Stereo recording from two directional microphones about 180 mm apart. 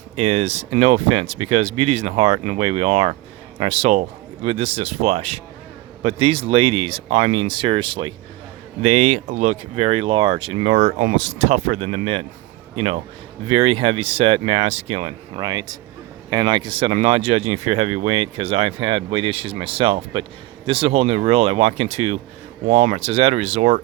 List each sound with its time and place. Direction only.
0.2 s speech: 35° right (ahead or behind)
15.4 s speech: 20° right (ahead or behind); by 23.8 s 35° right (ahead or behind)